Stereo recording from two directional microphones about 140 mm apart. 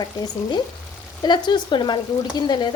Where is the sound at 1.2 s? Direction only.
35° left (ahead or behind).